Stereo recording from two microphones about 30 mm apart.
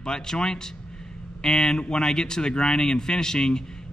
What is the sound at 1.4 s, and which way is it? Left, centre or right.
Speech, centre.